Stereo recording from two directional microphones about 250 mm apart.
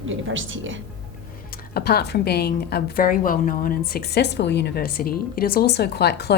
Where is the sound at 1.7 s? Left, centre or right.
Left.